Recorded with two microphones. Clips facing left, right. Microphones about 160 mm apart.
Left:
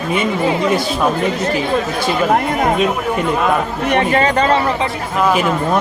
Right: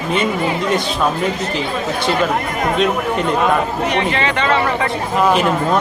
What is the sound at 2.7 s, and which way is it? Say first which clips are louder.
Speech: even; 5° left (ahead or behind).